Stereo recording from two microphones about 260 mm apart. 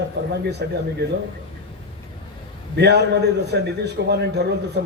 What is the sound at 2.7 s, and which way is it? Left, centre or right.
A man's voice, right.